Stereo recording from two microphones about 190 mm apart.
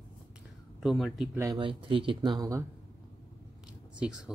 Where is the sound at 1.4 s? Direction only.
25° right (ahead or behind).